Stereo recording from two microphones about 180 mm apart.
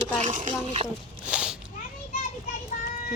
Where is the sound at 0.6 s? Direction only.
35° right (ahead or behind).